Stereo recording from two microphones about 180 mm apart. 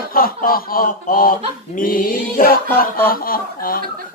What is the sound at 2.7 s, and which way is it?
Speech, 15° left (ahead or behind).